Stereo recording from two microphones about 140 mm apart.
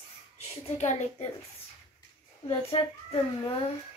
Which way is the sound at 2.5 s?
45° left (ahead or behind).